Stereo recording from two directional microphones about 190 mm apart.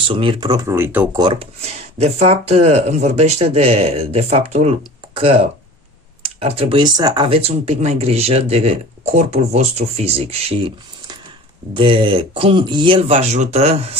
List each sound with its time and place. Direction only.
0.1 s speech: 25° right (ahead or behind)
1.2 s speech: 30° right (ahead or behind)
11.7 s speech: 25° right (ahead or behind)